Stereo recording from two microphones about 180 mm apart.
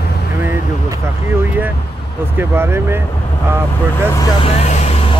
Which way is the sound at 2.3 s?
15° right (ahead or behind).